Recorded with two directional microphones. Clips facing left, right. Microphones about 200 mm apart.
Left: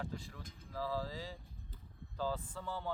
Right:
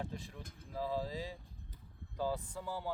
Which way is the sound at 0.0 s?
20° right (ahead or behind).